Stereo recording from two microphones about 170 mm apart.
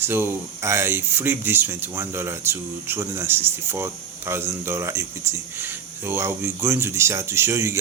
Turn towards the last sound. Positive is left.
turn(degrees=-15)  # may be behind; listen again after turning